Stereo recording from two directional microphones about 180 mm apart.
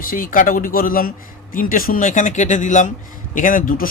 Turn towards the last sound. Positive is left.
turn(degrees=50)  # may be behind; listen again after turning